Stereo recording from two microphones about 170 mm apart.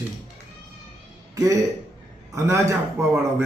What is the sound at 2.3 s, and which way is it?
A man's voice, 15° right (ahead or behind).